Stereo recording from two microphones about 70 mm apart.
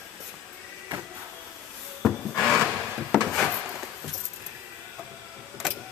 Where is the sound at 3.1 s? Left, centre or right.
Centre.